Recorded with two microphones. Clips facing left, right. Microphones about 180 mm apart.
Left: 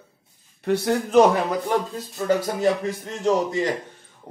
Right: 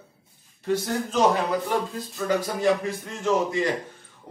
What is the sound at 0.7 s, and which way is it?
Speech, 65° left (ahead or behind).